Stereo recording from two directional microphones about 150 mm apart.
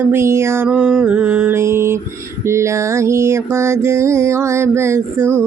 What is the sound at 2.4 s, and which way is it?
Mantra, 20° right (ahead or behind).